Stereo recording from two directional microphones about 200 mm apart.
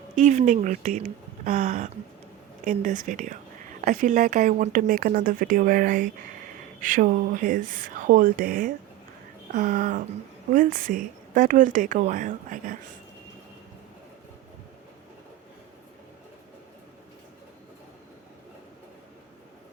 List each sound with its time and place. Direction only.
0.2 s a woman's voice: 35° right (ahead or behind)